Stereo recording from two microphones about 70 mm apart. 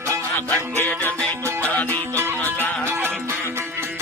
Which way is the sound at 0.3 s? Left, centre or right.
Left.